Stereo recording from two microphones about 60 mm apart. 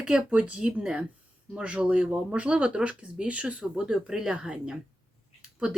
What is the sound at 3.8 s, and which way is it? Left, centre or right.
Speech, centre.